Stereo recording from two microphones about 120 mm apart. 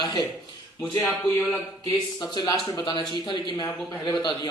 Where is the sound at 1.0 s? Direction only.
15° left (ahead or behind).